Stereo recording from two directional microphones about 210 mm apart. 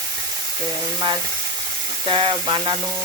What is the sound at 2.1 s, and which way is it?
Sizzle, 25° right (ahead or behind).